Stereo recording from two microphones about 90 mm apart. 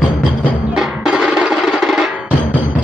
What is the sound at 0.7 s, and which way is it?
Percussion, 5° right (ahead or behind).